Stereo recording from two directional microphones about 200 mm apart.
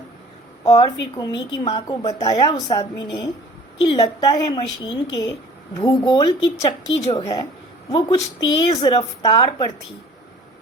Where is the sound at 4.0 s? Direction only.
20° left (ahead or behind).